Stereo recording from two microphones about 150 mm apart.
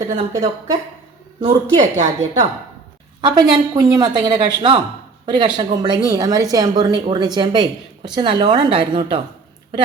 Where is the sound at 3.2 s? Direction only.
30° right (ahead or behind).